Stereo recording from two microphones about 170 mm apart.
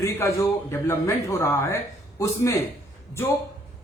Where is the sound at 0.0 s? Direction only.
20° left (ahead or behind).